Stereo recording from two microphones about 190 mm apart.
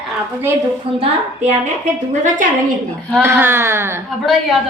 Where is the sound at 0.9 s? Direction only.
30° right (ahead or behind).